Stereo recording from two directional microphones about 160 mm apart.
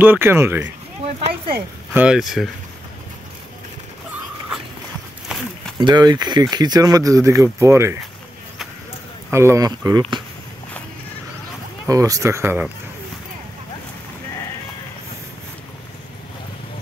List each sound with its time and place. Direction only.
0.0 s speech: 15° right (ahead or behind)
2.0 s speech: 5° right (ahead or behind)
5.8 s speech: 25° right (ahead or behind)
9.3 s speech: 15° right (ahead or behind)
11.9 s speech: 20° right (ahead or behind)